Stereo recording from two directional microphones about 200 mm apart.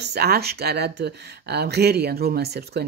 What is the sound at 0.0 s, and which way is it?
Speech, 55° right (ahead or behind).